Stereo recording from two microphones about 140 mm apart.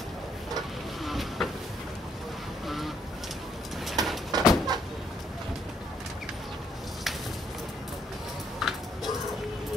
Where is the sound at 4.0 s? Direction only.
30° right (ahead or behind).